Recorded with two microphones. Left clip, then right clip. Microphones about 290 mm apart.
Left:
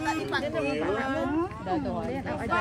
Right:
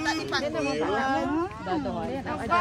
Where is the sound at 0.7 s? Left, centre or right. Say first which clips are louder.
Right 2 dB; right.